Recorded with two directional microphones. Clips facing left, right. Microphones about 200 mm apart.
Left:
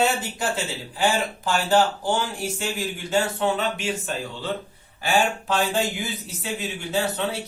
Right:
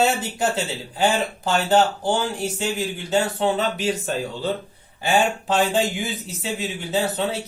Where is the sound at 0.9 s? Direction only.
25° right (ahead or behind).